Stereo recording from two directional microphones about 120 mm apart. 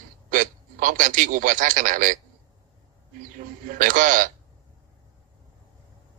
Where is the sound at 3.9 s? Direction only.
90° right.